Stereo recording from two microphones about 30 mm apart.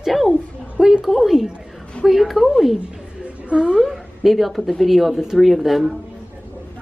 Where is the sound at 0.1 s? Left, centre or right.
Centre.